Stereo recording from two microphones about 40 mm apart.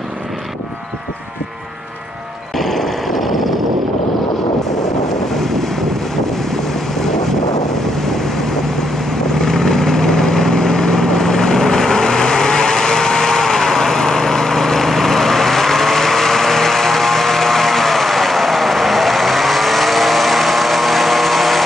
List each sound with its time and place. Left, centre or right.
2.5 s vehicle: centre
5.3 s wind noise: centre
6.5 s vehicle: centre
8.0 s waves: centre
9.3 s vehicle: centre